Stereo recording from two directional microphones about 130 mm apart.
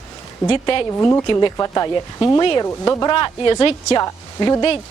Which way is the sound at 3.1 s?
35° left (ahead or behind).